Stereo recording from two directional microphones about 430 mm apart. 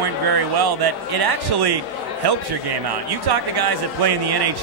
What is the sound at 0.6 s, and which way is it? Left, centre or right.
A man's voice, right.